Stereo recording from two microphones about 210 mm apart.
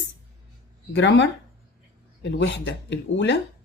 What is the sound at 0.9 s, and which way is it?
Speech, 60° left (ahead or behind).